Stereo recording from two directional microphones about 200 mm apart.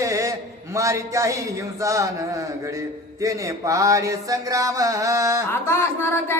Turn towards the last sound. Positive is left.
turn(degrees=10)  # may be behind; listen again after turning